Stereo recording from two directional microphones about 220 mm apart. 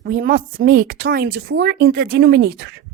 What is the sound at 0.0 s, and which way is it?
Speech, 40° right (ahead or behind).